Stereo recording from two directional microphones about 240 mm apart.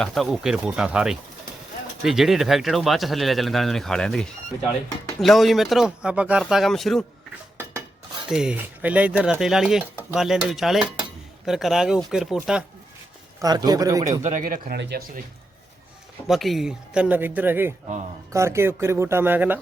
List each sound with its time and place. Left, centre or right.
0.0 s speech: centre
8.3 s speech: centre
13.7 s speech: centre
14.2 s speech: right
16.2 s speech: centre